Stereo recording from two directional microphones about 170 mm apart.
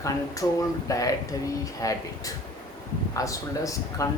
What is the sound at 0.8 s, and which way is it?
Speech, 20° left (ahead or behind).